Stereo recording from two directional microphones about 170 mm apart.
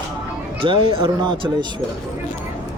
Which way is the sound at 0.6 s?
35° right (ahead or behind).